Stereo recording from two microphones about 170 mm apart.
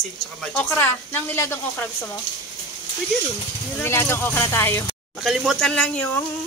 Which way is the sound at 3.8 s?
15° left (ahead or behind).